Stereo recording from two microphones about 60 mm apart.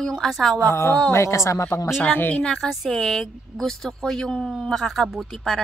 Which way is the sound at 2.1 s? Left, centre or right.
Left.